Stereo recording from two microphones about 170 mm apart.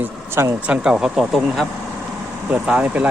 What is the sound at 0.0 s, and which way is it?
Speech, 15° right (ahead or behind).